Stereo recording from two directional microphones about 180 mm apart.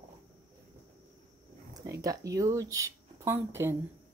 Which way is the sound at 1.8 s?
15° right (ahead or behind).